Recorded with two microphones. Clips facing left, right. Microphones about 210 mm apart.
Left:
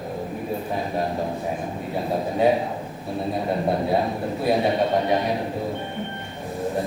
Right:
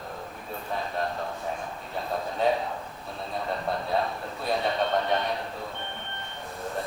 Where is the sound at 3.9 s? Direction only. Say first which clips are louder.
Left 6 dB; 15° left (ahead or behind).